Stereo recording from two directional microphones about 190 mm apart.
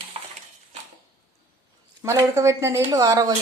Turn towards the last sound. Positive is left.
turn(degrees=-20)  # may be behind; listen again after turning